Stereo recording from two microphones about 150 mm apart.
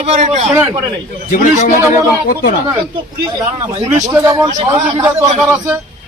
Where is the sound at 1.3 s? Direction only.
55° left (ahead or behind).